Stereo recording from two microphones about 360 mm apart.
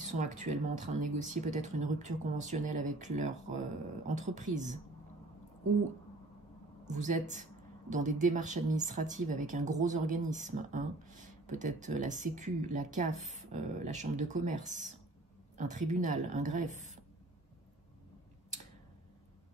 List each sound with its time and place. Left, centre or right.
0.2 s speech: centre
6.8 s a woman's voice: centre